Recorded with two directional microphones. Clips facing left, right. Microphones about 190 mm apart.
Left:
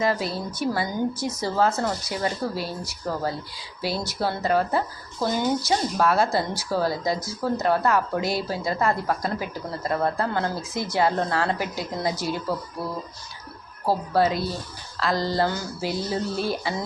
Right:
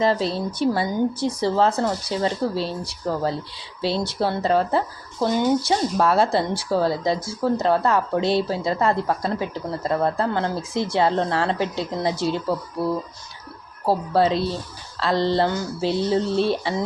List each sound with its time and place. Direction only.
0.0 s a woman's voice: 30° right (ahead or behind)
3.8 s a woman's voice: 25° right (ahead or behind)
14.1 s a woman's voice: 30° right (ahead or behind)